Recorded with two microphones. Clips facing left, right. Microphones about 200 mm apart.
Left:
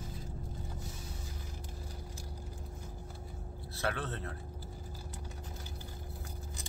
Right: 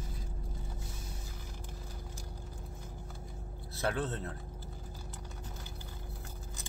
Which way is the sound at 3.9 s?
25° right (ahead or behind).